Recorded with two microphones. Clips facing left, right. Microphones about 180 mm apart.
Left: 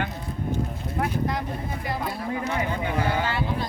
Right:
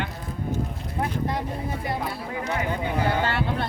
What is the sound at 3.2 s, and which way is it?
Speech, 65° right (ahead or behind).